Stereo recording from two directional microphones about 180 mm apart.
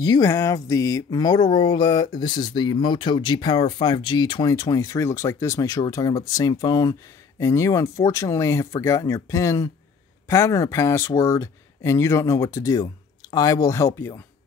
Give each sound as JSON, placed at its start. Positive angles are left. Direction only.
{"t": 0.0, "sound": "speech", "side_deg": 20}